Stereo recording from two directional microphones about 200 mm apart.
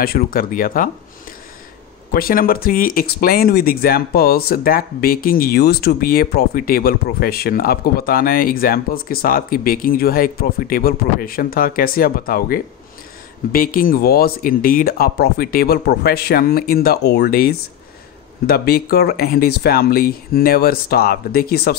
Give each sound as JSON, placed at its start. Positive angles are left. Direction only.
{"t": 0.0, "sound": "speech", "side_deg": 45}
{"t": 2.1, "sound": "speech", "side_deg": 50}